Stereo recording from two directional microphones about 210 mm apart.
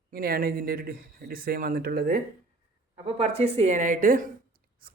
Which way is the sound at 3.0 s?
30° right (ahead or behind).